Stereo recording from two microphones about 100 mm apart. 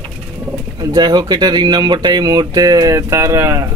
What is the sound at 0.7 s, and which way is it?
Speech, 45° right (ahead or behind).